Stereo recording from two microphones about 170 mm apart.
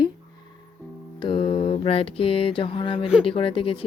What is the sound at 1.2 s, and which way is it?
Speech, 30° left (ahead or behind).